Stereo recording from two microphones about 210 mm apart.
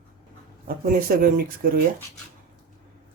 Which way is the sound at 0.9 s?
45° right (ahead or behind).